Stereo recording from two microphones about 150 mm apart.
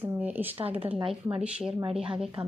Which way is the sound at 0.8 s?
35° right (ahead or behind).